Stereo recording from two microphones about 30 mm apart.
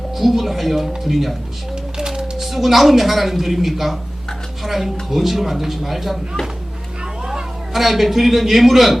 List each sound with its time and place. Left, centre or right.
0.2 s speech: centre
1.7 s a sound: right
2.4 s speech: centre
7.7 s speech: centre